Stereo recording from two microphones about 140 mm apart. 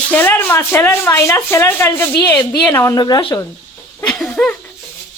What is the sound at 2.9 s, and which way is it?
Speech, 30° left (ahead or behind).